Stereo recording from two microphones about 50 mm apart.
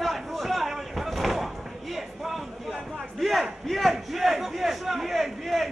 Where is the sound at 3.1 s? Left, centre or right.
Centre.